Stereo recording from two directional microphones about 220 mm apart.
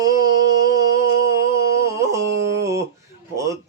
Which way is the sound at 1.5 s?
15° right (ahead or behind).